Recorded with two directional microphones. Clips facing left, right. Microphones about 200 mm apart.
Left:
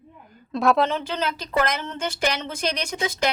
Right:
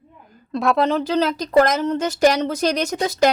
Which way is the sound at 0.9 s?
40° right (ahead or behind).